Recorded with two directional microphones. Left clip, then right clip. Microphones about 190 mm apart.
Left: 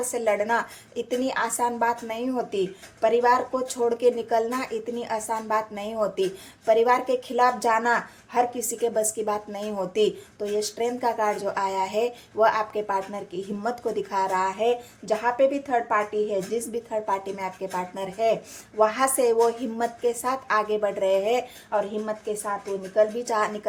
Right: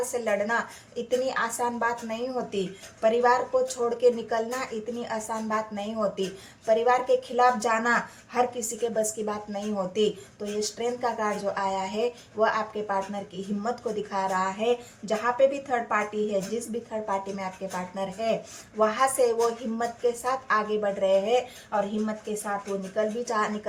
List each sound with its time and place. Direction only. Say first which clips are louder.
0.1 s speech: left 7 dB; 40° left (ahead or behind)